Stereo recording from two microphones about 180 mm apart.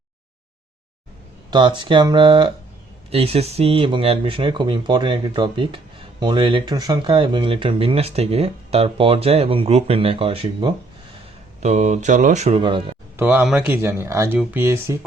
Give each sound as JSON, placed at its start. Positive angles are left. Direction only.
{"t": 1.5, "sound": "speech", "side_deg": -25}
{"t": 11.6, "sound": "speech", "side_deg": -40}
{"t": 13.1, "sound": "speech", "side_deg": -10}